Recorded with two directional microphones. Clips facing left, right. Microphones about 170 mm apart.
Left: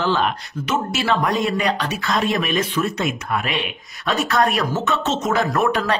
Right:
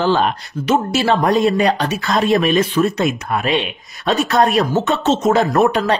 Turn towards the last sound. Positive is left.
turn(degrees=-25)  # may be behind; listen again after turning